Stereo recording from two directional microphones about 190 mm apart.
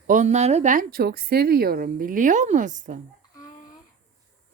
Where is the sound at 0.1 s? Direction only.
40° right (ahead or behind).